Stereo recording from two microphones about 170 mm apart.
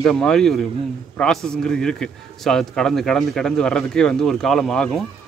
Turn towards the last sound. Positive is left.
turn(degrees=5)  # may be behind; listen again after turning